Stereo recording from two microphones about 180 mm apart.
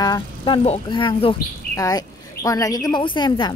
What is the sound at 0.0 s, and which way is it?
Speech, 20° left (ahead or behind).